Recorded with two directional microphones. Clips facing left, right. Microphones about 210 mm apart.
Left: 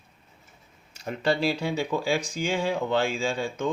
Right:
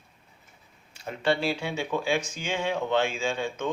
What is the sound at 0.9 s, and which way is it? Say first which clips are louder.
Speech: left 1 dB; 40° left (ahead or behind).